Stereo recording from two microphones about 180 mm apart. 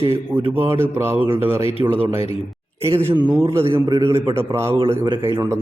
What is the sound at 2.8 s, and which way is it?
A man's voice, 15° right (ahead or behind).